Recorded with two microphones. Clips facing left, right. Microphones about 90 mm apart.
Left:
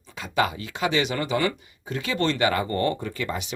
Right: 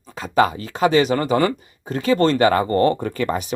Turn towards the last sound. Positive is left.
turn(degrees=-45)  # may be behind; listen again after turning